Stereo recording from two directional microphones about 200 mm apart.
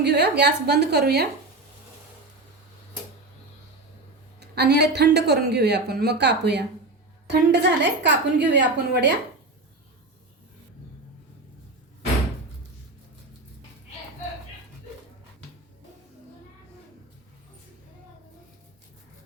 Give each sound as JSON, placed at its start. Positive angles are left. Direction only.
{"t": 0.0, "sound": "speech", "side_deg": -55}
{"t": 4.4, "sound": "speech", "side_deg": -55}